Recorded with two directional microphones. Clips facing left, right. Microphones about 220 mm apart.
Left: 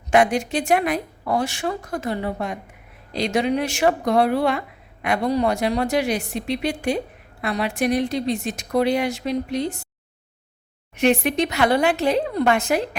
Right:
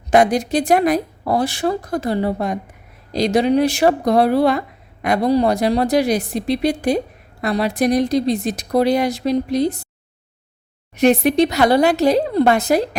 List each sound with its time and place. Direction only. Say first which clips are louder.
0.1 s speech: right 4 dB; 40° right (ahead or behind)
10.9 s speech: right 5 dB; 40° right (ahead or behind)